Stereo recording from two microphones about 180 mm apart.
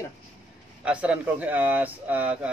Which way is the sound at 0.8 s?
5° right (ahead or behind).